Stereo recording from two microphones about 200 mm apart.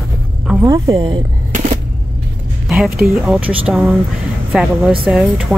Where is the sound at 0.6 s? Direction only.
15° right (ahead or behind).